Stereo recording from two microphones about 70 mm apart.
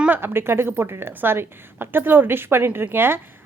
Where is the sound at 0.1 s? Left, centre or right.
Right.